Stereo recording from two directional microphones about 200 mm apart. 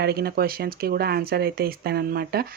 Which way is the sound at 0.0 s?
50° right (ahead or behind).